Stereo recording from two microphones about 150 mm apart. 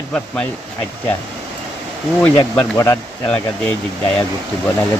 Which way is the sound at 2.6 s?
15° left (ahead or behind).